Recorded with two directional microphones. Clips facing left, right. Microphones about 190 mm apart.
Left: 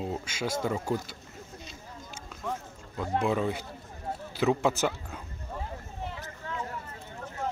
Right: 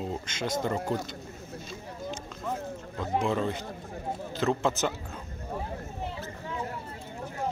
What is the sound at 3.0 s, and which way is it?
Speech, 5° right (ahead or behind).